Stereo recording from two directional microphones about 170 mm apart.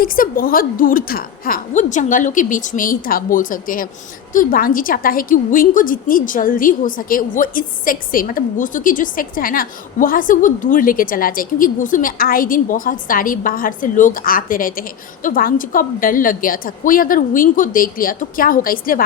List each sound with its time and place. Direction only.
0.0 s a woman's voice: 55° left (ahead or behind)